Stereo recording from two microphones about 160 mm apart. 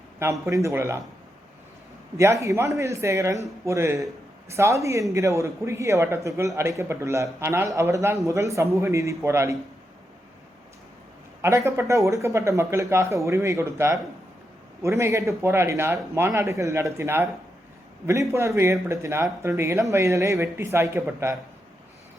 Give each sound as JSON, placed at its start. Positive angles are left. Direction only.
{"t": 0.2, "sound": "speech", "side_deg": -15}
{"t": 2.1, "sound": "a man's voice", "side_deg": -20}
{"t": 11.4, "sound": "speech", "side_deg": -15}